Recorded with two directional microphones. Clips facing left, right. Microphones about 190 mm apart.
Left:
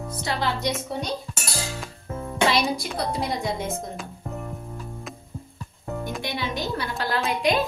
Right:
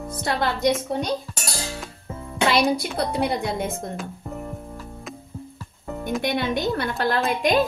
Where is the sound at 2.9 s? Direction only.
60° right (ahead or behind).